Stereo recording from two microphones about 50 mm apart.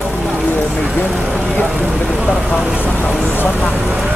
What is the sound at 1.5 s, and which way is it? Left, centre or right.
Speech, centre.